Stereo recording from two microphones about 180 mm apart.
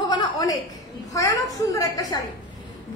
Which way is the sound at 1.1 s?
20° left (ahead or behind).